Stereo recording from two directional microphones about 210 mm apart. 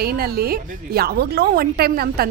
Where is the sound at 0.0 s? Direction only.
45° right (ahead or behind).